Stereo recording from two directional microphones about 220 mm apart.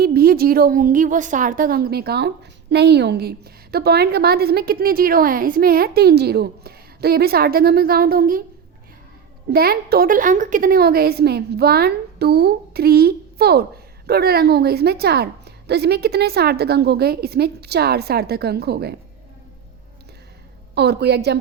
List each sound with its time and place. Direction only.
0.0 s a woman's voice: 45° right (ahead or behind)
9.5 s a woman's voice: 45° right (ahead or behind)
20.7 s a woman's voice: 50° right (ahead or behind)